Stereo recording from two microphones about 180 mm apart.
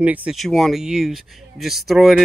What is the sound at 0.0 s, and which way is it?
Speech, 10° right (ahead or behind).